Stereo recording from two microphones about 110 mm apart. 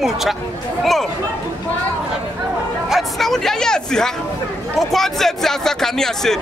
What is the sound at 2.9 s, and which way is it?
A man's voice, centre (ahead or behind).